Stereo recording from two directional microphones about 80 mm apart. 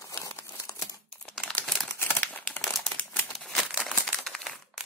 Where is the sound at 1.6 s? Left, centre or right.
Centre.